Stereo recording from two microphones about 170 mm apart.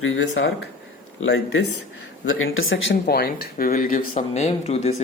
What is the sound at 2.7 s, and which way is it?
Speech, 80° left.